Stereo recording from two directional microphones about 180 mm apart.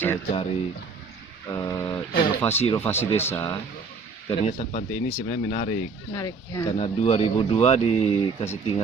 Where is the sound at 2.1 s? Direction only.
55° left (ahead or behind).